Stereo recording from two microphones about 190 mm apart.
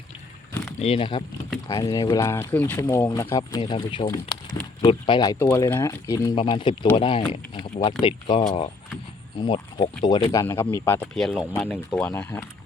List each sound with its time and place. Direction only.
0.8 s speech: 30° left (ahead or behind); by 12.5 s 10° left (ahead or behind)